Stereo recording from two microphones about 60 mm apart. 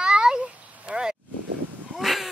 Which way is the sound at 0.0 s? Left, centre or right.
Centre.